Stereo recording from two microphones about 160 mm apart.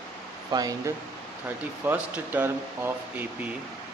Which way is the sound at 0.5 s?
20° right (ahead or behind).